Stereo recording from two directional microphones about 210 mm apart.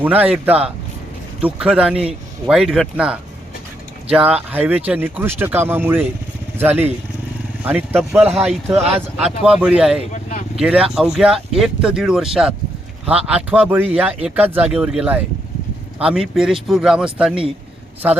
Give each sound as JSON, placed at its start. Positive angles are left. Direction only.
{"t": 0.0, "sound": "speech", "side_deg": -10}
{"t": 10.1, "sound": "vehicle", "side_deg": 35}
{"t": 10.6, "sound": "speech", "side_deg": -5}